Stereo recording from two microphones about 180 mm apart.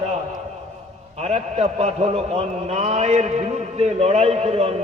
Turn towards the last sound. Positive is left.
turn(degrees=-35)  # may be behind; listen again after turning